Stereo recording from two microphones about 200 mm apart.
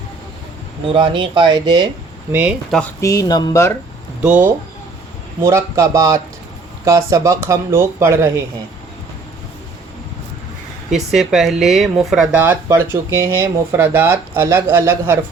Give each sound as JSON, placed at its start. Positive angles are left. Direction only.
{"t": 0.9, "sound": "speech", "side_deg": -25}
{"t": 2.3, "sound": "speech", "side_deg": -5}
{"t": 3.0, "sound": "speech", "side_deg": 15}
{"t": 4.2, "sound": "speech", "side_deg": -10}
{"t": 10.9, "sound": "speech", "side_deg": 0}